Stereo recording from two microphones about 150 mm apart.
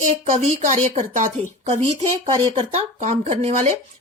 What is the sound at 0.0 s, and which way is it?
A woman's voice, 45° right (ahead or behind).